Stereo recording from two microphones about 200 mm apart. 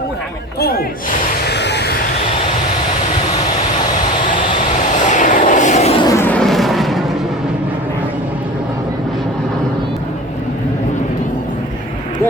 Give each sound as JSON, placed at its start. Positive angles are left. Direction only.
{"t": 0.6, "sound": "speech", "side_deg": 50}
{"t": 1.5, "sound": "a sound", "side_deg": 60}
{"t": 5.0, "sound": "vehicle", "side_deg": 40}
{"t": 6.0, "sound": "vehicle", "side_deg": 15}